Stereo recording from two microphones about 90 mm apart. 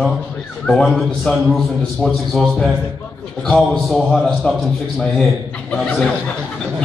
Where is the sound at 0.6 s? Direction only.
5° left (ahead or behind).